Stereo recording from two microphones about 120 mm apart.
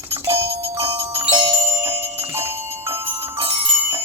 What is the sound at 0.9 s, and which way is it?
Music, 60° right (ahead or behind).